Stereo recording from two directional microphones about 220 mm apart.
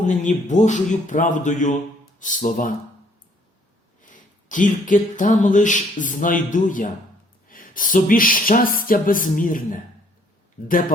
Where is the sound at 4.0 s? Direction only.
35° left (ahead or behind).